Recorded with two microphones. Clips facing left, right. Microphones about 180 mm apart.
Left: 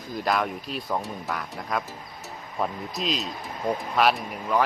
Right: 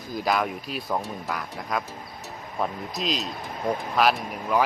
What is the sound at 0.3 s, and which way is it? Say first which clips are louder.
Speech: even; 5° right (ahead or behind).